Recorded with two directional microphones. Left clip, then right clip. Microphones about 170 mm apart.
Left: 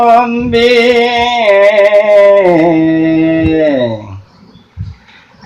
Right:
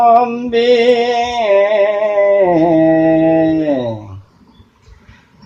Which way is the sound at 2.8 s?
35° right (ahead or behind).